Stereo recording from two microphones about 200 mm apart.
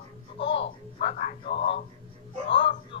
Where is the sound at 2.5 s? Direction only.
25° left (ahead or behind).